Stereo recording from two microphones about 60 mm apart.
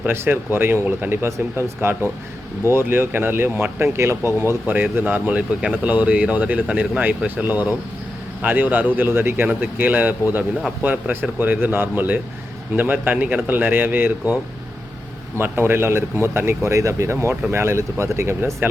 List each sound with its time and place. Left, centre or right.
0.1 s speech: right
4.6 s speech: right
15.4 s speech: right
16.6 s speech: right